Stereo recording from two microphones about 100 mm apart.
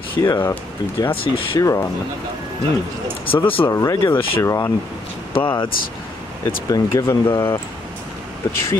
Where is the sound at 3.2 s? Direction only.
65° left (ahead or behind).